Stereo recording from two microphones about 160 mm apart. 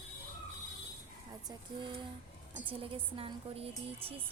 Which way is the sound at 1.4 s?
30° right (ahead or behind).